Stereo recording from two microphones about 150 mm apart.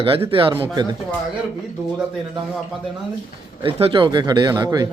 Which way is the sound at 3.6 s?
35° right (ahead or behind).